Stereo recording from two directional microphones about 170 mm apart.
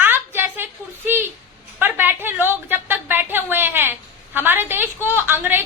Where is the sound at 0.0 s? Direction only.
10° right (ahead or behind).